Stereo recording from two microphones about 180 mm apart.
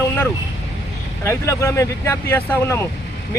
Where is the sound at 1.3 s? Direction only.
15° left (ahead or behind).